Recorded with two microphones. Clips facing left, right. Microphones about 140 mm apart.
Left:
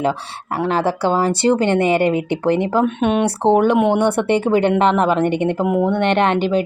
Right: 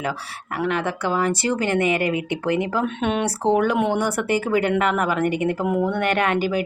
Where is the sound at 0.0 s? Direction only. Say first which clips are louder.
Left 7 dB; 30° left (ahead or behind).